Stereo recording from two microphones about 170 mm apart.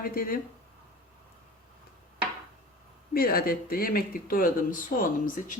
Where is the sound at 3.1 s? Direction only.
60° left (ahead or behind).